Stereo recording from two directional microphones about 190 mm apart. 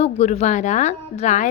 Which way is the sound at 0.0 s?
35° left (ahead or behind).